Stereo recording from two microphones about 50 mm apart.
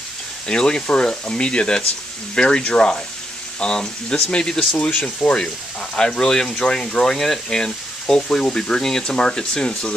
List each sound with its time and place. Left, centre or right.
0.5 s speech: centre